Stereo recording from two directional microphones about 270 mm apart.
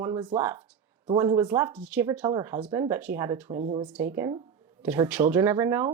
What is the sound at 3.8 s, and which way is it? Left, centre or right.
Speech, centre.